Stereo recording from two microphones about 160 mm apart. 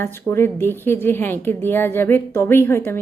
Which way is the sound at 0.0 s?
15° left (ahead or behind).